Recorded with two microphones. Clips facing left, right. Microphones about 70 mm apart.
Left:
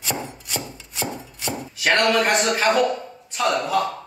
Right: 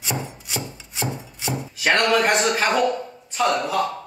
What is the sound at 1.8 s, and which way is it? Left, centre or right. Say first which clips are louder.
Speech: even; centre.